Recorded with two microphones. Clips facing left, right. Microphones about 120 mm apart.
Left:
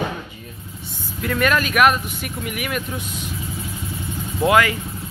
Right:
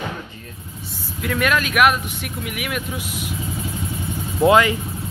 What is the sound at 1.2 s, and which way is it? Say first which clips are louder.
Speech: left 1 dB; centre (ahead or behind).